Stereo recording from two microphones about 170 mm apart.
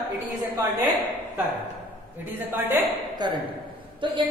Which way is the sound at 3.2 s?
25° right (ahead or behind).